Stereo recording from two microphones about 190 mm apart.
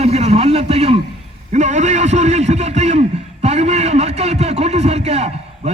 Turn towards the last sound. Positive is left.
turn(degrees=-35)  # may be behind; listen again after turning